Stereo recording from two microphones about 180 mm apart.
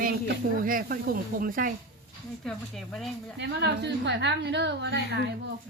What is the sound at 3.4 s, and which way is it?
A woman's voice, 70° right (ahead or behind).